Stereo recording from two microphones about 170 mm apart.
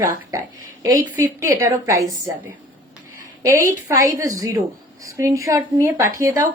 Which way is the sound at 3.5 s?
15° right (ahead or behind).